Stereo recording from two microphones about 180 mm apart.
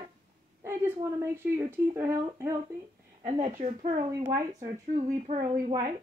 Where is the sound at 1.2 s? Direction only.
15° right (ahead or behind).